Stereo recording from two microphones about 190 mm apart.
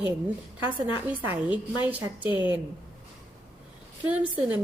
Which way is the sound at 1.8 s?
10° right (ahead or behind).